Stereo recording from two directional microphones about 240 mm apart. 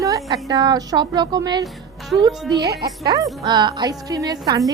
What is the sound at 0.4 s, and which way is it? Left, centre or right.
A woman's voice, centre.